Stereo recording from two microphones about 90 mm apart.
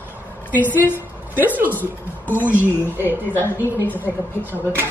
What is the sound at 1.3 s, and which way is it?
Speech, 20° right (ahead or behind).